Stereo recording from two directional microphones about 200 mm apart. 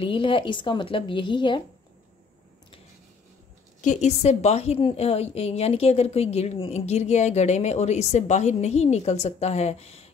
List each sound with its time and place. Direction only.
0.0 s a woman's voice: 25° left (ahead or behind)
3.8 s a woman's voice: 35° left (ahead or behind)